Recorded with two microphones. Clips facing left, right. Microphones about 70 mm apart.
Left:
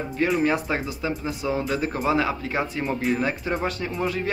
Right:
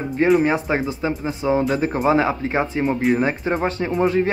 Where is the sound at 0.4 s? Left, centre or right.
Right.